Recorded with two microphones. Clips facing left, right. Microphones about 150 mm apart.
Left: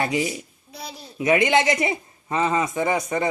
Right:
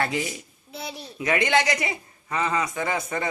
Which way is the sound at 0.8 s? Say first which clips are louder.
Right 2 dB; centre (ahead or behind).